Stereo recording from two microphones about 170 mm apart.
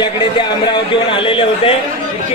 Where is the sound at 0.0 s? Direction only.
25° left (ahead or behind).